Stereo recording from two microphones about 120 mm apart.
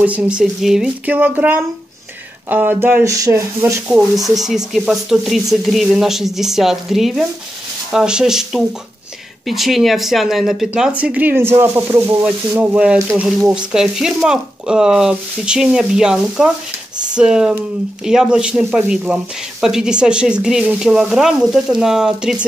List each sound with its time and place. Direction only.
0.0 s speech: 10° right (ahead or behind)
4.4 s speech: 5° right (ahead or behind)